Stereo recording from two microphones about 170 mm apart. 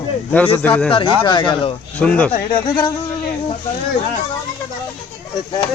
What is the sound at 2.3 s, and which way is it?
Speech, 30° left (ahead or behind).